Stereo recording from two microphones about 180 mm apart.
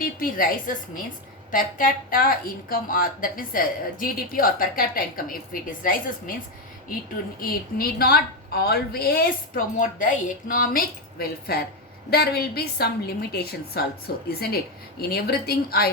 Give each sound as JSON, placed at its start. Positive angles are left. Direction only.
{"t": 0.0, "sound": "a woman's voice", "side_deg": 50}
{"t": 7.3, "sound": "a woman's voice", "side_deg": 55}